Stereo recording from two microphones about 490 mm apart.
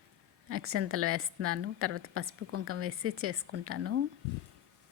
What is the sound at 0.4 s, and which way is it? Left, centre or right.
A woman's voice, right.